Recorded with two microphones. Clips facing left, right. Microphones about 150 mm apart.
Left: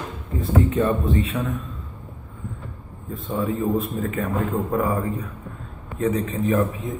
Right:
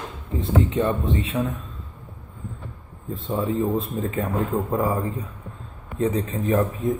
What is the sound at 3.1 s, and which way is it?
Speech, 30° right (ahead or behind).